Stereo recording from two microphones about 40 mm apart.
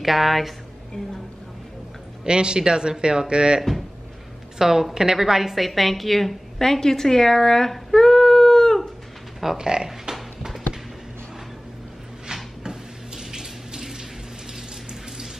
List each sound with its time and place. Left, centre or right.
0.0 s a woman's voice: centre
2.2 s speech: right
4.6 s a woman's voice: centre
9.6 s speech: centre
10.1 s a sound: centre
12.3 s drawer open or close: centre
12.6 s water tap: centre